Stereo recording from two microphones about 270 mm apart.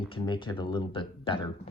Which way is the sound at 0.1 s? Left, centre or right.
Centre.